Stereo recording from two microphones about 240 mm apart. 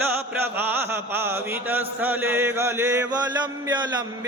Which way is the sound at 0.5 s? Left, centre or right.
Centre.